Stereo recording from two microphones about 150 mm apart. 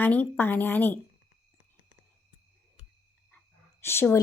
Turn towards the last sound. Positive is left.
turn(degrees=15)  # may be behind; listen again after turning